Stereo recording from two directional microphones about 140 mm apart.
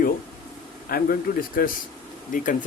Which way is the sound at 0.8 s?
90° left.